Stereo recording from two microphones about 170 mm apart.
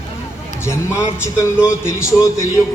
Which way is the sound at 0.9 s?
15° left (ahead or behind).